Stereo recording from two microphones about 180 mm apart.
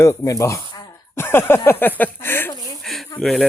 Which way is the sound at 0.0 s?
15° left (ahead or behind).